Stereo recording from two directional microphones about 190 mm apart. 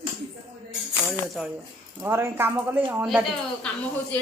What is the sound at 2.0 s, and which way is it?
A woman's voice, 10° right (ahead or behind).